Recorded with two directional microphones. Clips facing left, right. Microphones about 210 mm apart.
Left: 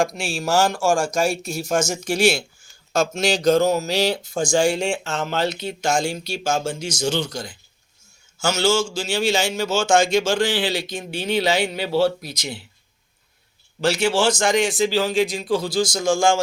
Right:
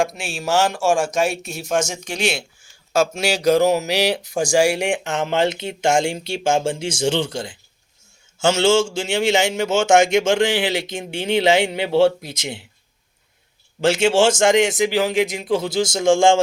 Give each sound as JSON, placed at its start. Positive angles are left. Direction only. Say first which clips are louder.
{"t": 0.0, "sound": "speech", "louder": "even", "side_deg": 0}
{"t": 2.9, "sound": "speech", "louder": "right 1 dB", "side_deg": -10}
{"t": 13.8, "sound": "speech", "louder": "right 3 dB", "side_deg": -25}